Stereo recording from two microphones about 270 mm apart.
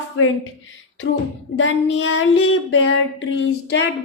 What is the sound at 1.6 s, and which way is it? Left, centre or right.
A woman's voice, left.